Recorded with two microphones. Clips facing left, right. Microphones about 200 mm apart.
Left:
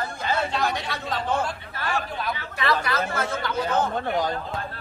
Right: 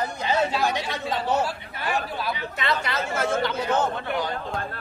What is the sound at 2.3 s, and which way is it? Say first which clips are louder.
Speech: left 2 dB; 20° right (ahead or behind).